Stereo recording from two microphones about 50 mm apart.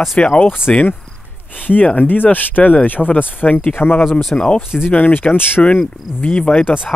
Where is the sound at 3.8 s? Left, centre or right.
Left.